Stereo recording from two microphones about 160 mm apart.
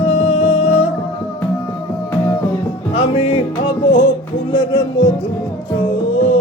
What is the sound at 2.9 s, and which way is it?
Music, 35° left (ahead or behind).